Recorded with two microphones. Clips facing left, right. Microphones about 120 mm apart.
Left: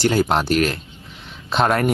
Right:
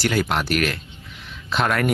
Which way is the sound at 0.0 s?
30° left (ahead or behind).